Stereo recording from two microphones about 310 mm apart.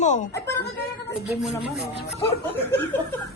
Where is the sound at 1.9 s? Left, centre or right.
Left.